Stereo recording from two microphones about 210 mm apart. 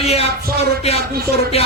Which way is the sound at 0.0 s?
30° left (ahead or behind).